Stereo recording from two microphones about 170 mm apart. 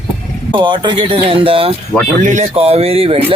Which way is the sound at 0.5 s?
30° right (ahead or behind).